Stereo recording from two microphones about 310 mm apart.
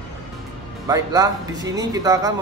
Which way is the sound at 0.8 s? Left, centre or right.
Centre.